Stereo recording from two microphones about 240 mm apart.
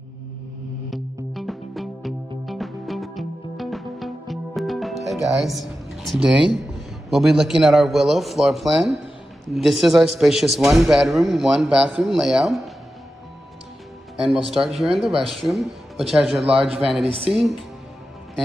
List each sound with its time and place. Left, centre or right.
0.8 s music: centre
9.5 s a man's voice: centre
14.2 s a man's voice: centre
17.0 s speech: right
17.3 s a man's voice: centre